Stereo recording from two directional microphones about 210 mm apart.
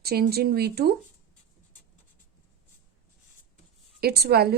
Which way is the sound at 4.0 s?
50° right (ahead or behind).